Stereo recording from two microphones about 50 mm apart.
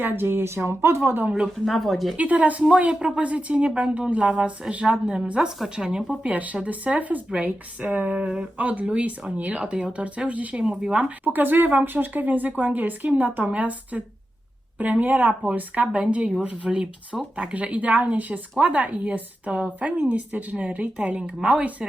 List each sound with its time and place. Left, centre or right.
0.0 s speech: right
1.6 s speech: centre
2.1 s speech: right
6.2 s speech: right
10.6 s speech: centre
10.9 s speech: right